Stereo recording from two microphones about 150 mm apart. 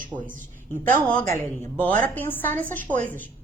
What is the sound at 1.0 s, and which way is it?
A woman's voice, 10° left (ahead or behind).